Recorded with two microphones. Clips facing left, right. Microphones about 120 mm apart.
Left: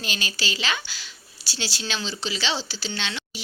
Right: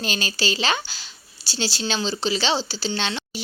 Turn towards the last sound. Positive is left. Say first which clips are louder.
# right 5 dB
turn(degrees=-35)  # may be behind; listen again after turning